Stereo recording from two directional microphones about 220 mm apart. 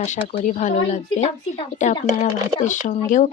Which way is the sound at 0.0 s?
35° left (ahead or behind).